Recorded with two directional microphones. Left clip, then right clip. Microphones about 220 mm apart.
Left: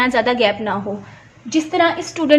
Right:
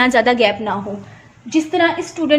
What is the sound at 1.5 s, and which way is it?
Speech, 30° left (ahead or behind).